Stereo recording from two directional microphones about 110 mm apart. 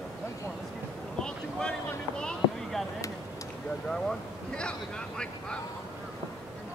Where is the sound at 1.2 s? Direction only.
5° left (ahead or behind).